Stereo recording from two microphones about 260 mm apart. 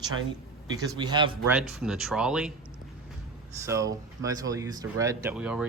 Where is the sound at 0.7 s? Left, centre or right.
Centre.